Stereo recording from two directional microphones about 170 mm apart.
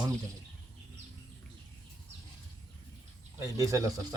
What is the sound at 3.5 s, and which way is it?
Speech, 20° right (ahead or behind).